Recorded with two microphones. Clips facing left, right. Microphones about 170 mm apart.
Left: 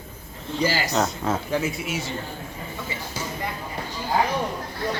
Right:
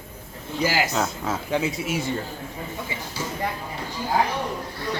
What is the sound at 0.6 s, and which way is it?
Speech, 10° right (ahead or behind).